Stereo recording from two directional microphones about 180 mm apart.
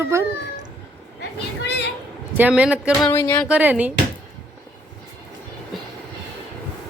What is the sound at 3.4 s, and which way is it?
Speech, 10° right (ahead or behind).